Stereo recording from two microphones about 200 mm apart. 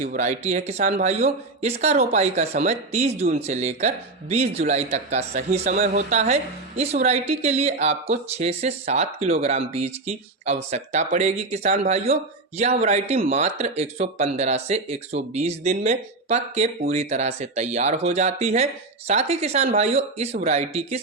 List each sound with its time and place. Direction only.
0.0 s speech: 35° right (ahead or behind)